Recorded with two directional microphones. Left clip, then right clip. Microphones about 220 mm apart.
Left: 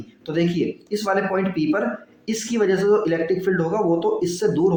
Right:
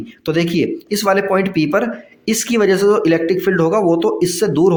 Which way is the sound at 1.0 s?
50° right (ahead or behind).